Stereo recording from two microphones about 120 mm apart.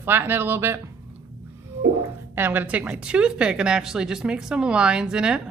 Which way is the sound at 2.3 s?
15° right (ahead or behind).